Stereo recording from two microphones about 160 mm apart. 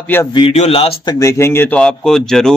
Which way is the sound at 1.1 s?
20° left (ahead or behind).